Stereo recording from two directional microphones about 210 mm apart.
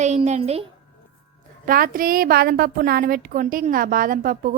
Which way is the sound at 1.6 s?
40° right (ahead or behind).